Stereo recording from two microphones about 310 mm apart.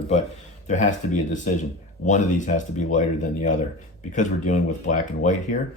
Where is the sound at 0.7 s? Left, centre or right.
Left.